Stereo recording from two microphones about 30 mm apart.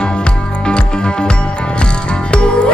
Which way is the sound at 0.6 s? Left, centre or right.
Left.